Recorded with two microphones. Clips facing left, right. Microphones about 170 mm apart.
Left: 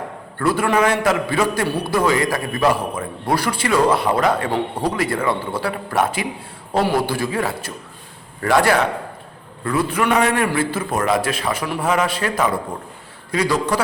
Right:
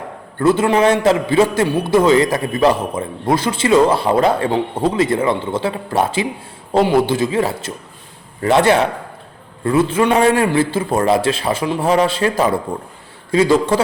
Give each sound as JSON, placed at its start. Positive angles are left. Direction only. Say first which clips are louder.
{"t": 0.3, "sound": "a man's voice", "louder": "right 4 dB", "side_deg": -25}